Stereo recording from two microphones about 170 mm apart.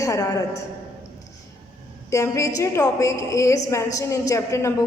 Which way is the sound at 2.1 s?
20° left (ahead or behind).